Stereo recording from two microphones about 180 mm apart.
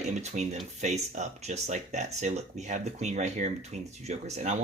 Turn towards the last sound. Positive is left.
turn(degrees=-40)  # may be behind; listen again after turning